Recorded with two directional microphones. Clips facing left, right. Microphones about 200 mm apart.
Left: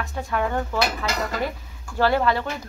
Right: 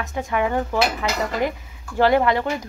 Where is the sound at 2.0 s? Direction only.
15° right (ahead or behind).